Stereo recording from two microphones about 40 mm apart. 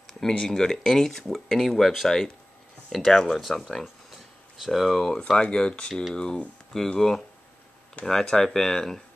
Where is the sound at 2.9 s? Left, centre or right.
Centre.